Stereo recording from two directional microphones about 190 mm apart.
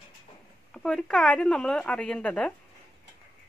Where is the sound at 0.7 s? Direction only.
5° left (ahead or behind).